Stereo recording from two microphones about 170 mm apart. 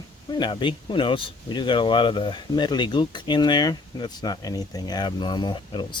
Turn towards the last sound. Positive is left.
turn(degrees=25)  # may be behind; listen again after turning